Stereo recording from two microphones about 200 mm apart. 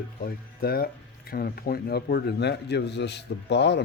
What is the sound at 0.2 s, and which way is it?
Speech, 50° left (ahead or behind).